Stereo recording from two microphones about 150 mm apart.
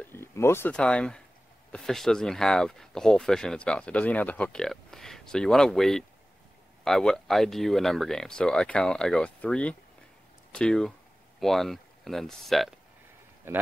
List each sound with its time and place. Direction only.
0.0 s speech: 15° left (ahead or behind)
13.5 s speech: 15° right (ahead or behind)